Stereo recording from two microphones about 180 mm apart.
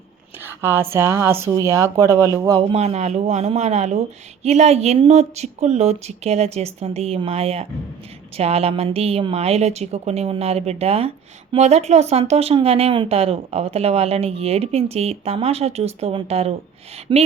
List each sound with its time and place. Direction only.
0.4 s a man's voice: 15° right (ahead or behind)
2.7 s a man's voice: 35° right (ahead or behind)